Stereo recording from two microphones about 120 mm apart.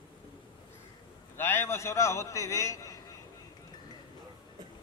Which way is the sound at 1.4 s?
20° left (ahead or behind).